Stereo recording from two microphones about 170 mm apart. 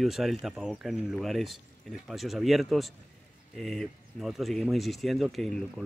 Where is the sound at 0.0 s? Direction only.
Centre (ahead or behind).